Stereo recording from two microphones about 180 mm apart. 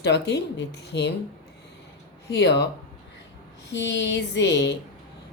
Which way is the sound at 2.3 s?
70° left (ahead or behind).